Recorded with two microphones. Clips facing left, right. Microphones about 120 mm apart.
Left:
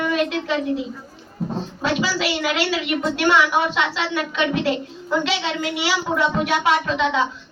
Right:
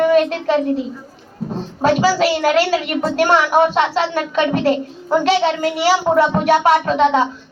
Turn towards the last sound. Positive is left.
turn(degrees=-45)  # may be behind; listen again after turning